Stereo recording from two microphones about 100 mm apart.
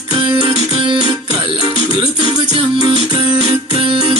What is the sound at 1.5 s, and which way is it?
Music, 60° right (ahead or behind).